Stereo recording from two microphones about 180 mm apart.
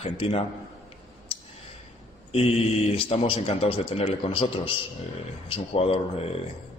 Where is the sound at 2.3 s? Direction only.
35° left (ahead or behind).